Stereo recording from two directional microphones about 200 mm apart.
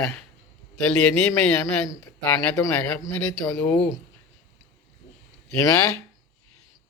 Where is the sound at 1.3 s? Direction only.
10° left (ahead or behind).